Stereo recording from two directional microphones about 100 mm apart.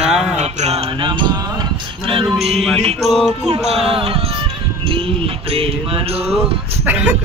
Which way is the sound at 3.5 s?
90° right.